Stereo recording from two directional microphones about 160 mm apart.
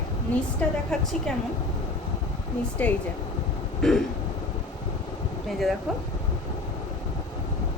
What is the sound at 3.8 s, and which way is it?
Throat clearing, centre (ahead or behind).